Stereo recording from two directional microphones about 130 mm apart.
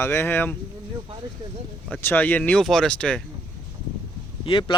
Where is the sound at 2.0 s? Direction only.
15° left (ahead or behind).